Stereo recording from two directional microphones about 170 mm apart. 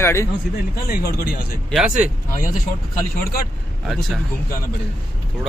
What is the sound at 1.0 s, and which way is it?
Speech, 70° left (ahead or behind).